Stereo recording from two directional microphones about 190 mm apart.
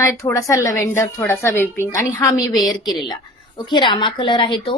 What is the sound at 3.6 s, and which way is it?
A woman's voice, 25° left (ahead or behind).